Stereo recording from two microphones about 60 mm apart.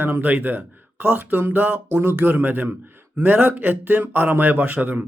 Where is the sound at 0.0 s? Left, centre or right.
Right.